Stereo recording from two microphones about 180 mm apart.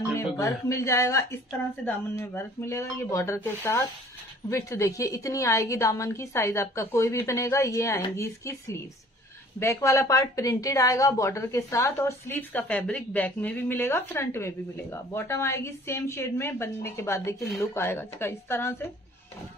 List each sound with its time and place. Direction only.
0.4 s a woman's voice: 15° left (ahead or behind)